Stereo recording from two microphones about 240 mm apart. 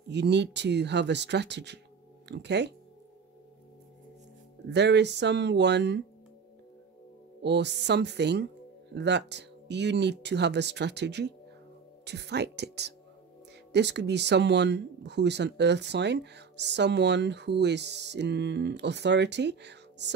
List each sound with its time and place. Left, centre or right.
0.1 s speech: right
4.6 s speech: right
7.4 s speech: right